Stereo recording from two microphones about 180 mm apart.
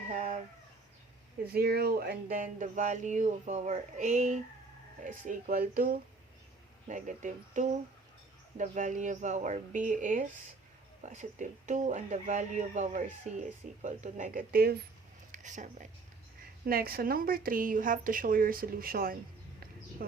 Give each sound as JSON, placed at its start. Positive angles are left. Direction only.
{"t": 0.1, "sound": "a sound", "side_deg": -45}
{"t": 1.5, "sound": "speech", "side_deg": -60}
{"t": 6.8, "sound": "speech", "side_deg": -45}
{"t": 15.3, "sound": "speech", "side_deg": -45}
{"t": 16.6, "sound": "speech", "side_deg": -55}